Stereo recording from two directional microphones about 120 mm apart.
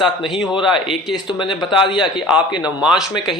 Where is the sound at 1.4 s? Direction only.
45° left (ahead or behind).